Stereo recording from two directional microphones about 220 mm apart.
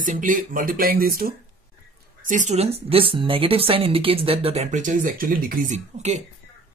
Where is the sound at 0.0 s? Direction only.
35° right (ahead or behind).